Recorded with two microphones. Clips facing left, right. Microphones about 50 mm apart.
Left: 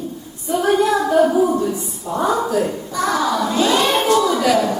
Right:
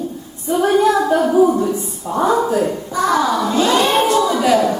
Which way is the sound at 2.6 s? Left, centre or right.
Centre.